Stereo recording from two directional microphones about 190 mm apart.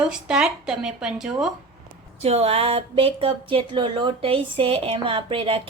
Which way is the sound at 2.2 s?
30° right (ahead or behind).